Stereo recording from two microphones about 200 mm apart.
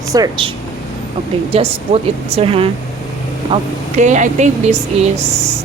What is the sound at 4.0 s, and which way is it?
Speech, 35° right (ahead or behind).